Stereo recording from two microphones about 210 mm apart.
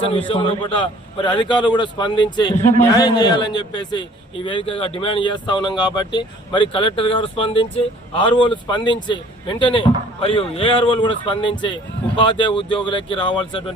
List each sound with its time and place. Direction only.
0.0 s speech: 25° left (ahead or behind)